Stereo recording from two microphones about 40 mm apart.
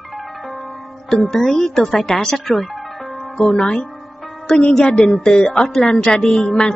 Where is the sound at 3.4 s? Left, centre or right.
Left.